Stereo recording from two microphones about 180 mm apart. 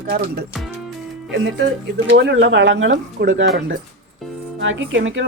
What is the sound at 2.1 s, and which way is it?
Speech, 90° right.